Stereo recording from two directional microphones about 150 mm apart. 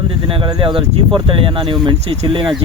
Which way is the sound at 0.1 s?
35° right (ahead or behind).